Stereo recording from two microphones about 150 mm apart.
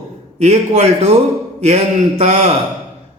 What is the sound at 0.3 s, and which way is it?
A man's voice, 50° right (ahead or behind).